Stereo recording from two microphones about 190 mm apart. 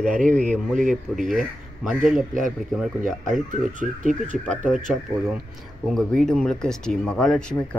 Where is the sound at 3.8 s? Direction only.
40° right (ahead or behind).